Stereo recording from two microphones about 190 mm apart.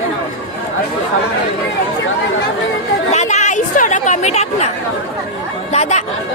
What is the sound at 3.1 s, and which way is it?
Chatter, 35° left (ahead or behind).